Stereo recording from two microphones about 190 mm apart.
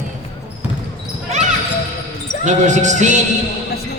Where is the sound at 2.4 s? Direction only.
40° right (ahead or behind).